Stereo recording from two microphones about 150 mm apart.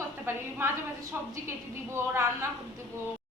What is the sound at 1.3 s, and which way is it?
Speech, 20° right (ahead or behind).